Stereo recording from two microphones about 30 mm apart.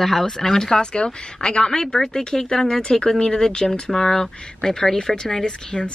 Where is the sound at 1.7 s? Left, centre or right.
Centre.